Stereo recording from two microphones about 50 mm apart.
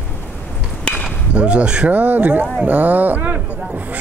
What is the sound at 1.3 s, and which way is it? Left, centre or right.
Speech, right.